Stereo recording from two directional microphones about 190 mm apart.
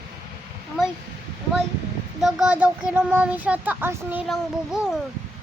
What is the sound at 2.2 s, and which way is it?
Speech, 5° right (ahead or behind).